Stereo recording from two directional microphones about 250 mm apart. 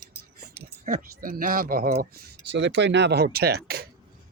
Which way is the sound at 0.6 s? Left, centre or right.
Right.